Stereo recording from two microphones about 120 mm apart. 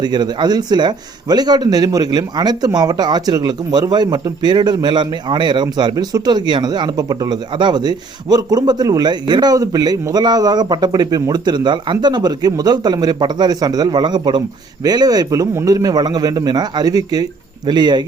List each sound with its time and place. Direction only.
0.0 s speech: 35° right (ahead or behind)